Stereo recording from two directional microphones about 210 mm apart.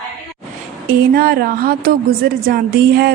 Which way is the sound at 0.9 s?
45° right (ahead or behind).